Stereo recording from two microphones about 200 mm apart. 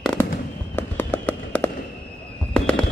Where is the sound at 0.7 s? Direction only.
10° left (ahead or behind).